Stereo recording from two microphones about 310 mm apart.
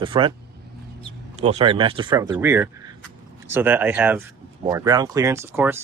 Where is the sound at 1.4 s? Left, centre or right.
Centre.